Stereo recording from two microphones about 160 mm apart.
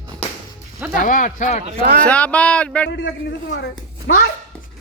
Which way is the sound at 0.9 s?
55° left (ahead or behind).